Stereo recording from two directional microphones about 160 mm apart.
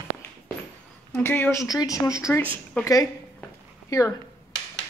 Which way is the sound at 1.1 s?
10° left (ahead or behind).